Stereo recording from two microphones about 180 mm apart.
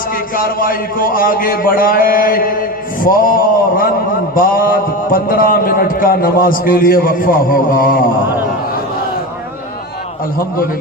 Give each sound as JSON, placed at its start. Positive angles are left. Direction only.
{"t": 0.3, "sound": "a man's voice", "side_deg": 50}